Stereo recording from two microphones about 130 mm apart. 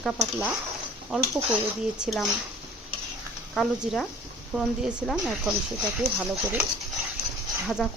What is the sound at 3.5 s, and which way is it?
Speech, 5° left (ahead or behind).